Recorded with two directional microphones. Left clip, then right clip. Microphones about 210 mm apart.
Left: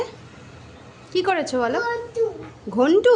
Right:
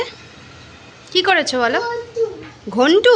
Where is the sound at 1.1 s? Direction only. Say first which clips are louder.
Right 6 dB; 5° left (ahead or behind).